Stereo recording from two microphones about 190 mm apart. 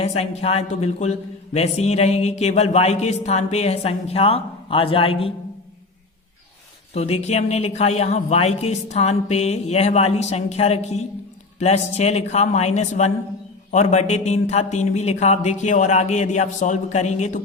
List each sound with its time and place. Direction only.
0.0 s speech: 35° left (ahead or behind)
6.9 s speech: 35° left (ahead or behind)